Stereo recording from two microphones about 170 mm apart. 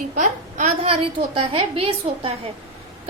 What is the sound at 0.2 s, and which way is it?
A woman's voice, 45° right (ahead or behind).